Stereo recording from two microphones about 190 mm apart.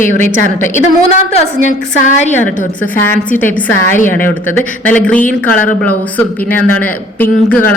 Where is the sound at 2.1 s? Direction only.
40° left (ahead or behind).